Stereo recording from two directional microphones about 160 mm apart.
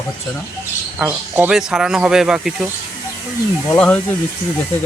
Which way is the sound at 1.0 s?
10° right (ahead or behind).